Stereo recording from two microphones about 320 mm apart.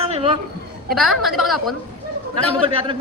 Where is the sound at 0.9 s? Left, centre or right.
Centre.